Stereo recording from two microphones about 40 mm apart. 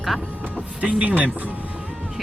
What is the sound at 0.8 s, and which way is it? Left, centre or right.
Speech, right.